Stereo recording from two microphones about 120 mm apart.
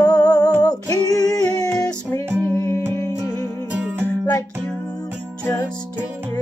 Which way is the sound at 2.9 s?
25° left (ahead or behind).